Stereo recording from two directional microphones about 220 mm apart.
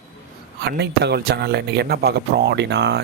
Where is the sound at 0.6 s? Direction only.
50° right (ahead or behind).